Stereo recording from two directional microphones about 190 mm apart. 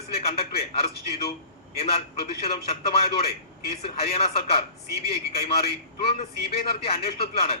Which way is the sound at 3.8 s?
30° left (ahead or behind).